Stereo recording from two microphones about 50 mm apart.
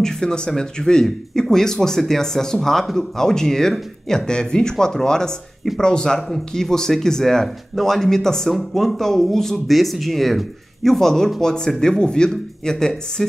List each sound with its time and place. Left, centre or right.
0.0 s a man's voice: centre